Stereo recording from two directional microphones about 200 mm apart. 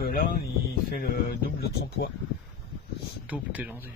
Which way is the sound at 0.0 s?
50° left (ahead or behind).